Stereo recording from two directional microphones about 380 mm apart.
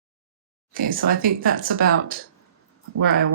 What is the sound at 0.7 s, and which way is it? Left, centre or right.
Speech, right.